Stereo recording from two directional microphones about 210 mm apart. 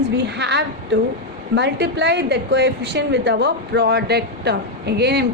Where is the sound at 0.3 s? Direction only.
55° right (ahead or behind).